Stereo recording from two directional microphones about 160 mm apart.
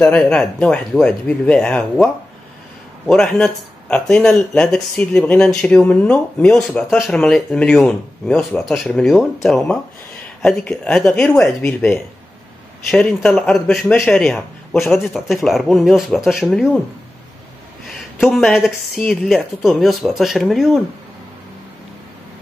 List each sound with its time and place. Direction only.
0.0 s speech: 5° left (ahead or behind)
3.1 s speech: 5° left (ahead or behind)
11.3 s speech: 15° left (ahead or behind)
12.9 s speech: 5° left (ahead or behind)
17.9 s speech: centre (ahead or behind)